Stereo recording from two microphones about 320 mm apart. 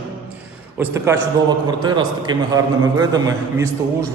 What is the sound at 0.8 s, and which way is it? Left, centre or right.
A man's voice, centre.